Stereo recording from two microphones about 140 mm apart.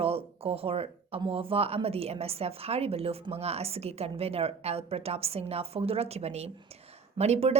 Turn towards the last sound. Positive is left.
turn(degrees=-50)  # may be behind; listen again after turning